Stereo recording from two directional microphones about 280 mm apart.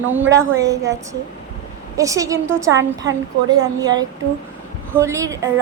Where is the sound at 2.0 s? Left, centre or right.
Centre.